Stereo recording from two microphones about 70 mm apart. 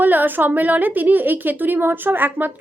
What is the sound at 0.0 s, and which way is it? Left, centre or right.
A woman's voice, right.